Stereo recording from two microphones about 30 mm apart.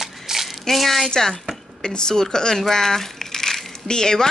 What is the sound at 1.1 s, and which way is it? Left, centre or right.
A woman's voice, centre.